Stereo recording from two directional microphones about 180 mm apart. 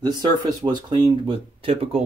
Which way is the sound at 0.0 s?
25° right (ahead or behind).